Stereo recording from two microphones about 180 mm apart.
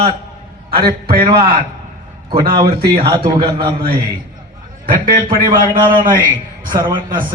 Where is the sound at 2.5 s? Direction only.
55° right (ahead or behind).